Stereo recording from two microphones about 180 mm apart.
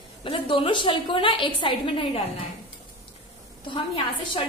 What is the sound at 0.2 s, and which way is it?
A woman's voice, 30° left (ahead or behind).